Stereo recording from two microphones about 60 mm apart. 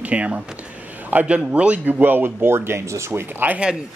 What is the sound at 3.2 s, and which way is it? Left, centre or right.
Speech, right.